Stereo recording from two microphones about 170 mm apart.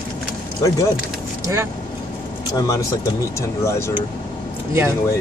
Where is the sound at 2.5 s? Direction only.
20° left (ahead or behind).